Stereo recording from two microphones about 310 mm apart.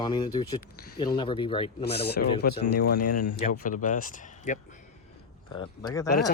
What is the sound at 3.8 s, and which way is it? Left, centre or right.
Speech, left.